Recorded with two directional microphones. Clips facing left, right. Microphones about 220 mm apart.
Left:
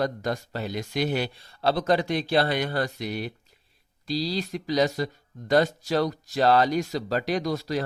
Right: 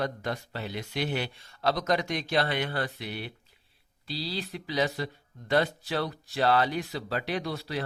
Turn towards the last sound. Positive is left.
turn(degrees=40)  # may be behind; listen again after turning